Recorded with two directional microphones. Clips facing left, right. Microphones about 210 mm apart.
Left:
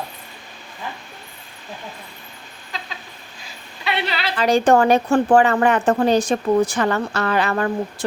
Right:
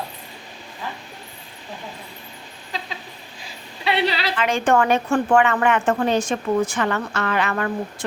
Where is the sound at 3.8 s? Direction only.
35° right (ahead or behind).